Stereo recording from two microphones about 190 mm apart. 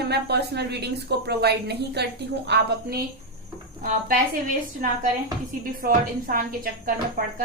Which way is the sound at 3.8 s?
45° right (ahead or behind).